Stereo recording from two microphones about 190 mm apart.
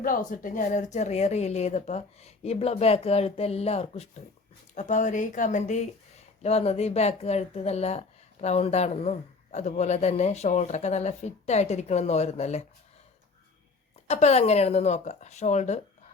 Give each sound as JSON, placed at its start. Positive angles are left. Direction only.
{"t": 0.0, "sound": "speech", "side_deg": 45}
{"t": 14.1, "sound": "speech", "side_deg": 35}